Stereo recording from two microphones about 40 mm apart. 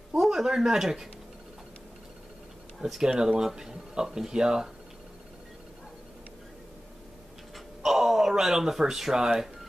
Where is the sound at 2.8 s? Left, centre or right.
Centre.